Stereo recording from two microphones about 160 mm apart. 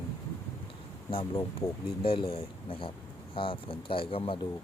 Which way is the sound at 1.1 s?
35° left (ahead or behind).